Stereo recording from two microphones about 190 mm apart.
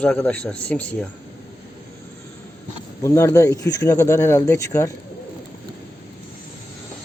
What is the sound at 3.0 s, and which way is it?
Speech, 15° left (ahead or behind).